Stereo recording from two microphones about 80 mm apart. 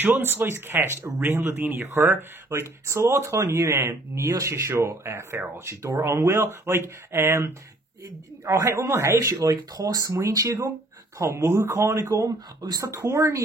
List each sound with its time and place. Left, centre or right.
0.0 s speech: right